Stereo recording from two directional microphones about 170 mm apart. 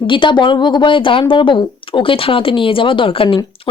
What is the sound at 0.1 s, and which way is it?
Speech, 30° left (ahead or behind).